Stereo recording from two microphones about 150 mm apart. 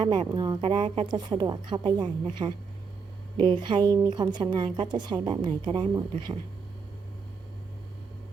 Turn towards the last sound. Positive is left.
turn(degrees=-30)  # may be behind; listen again after turning